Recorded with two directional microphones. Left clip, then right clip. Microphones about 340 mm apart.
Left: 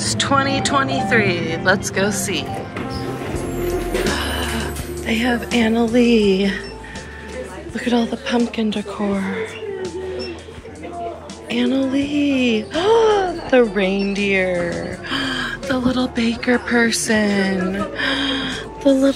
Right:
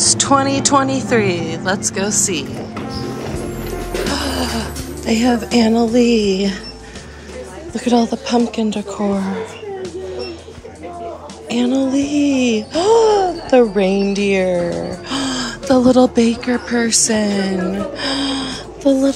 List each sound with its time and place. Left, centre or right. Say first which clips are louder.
0.0 s speech: right 4 dB; centre
2.9 s music: right 1 dB; centre
4.1 s music: right 2 dB; centre
5.9 s speech: left 2 dB; centre
7.7 s speech: right 4 dB; centre
11.4 s speech: right 2 dB; centre
14.7 s music: right 2 dB; centre
15.7 s speech: right 11 dB; centre